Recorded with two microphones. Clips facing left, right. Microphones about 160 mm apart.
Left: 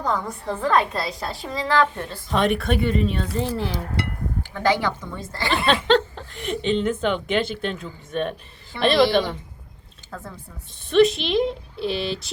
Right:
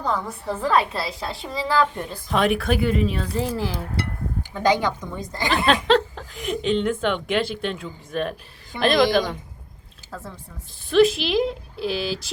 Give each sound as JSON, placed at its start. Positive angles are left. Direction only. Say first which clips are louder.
{"t": 0.0, "sound": "a woman's voice", "louder": "left 1 dB", "side_deg": -5}
{"t": 2.3, "sound": "a woman's voice", "louder": "even", "side_deg": 0}
{"t": 4.5, "sound": "a woman's voice", "louder": "right 1 dB", "side_deg": -15}
{"t": 5.6, "sound": "a woman's voice", "louder": "even", "side_deg": 0}
{"t": 10.1, "sound": "a woman's voice", "louder": "even", "side_deg": 0}